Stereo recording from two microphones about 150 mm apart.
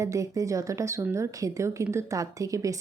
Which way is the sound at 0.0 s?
20° right (ahead or behind).